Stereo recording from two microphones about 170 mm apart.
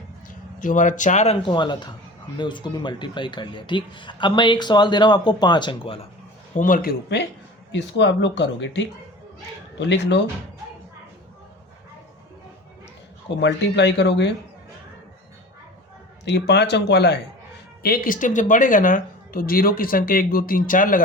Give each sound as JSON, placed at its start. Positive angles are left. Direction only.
{"t": 0.3, "sound": "speech", "side_deg": 50}
{"t": 6.6, "sound": "speech", "side_deg": 50}
{"t": 7.7, "sound": "speech", "side_deg": 90}
{"t": 13.4, "sound": "speech", "side_deg": 90}
{"t": 16.2, "sound": "speech", "side_deg": 80}
{"t": 17.8, "sound": "speech", "side_deg": 60}